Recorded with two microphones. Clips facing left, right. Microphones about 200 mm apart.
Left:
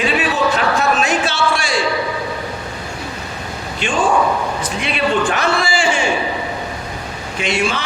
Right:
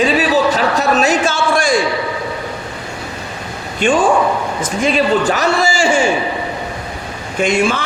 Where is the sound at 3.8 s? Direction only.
55° right (ahead or behind).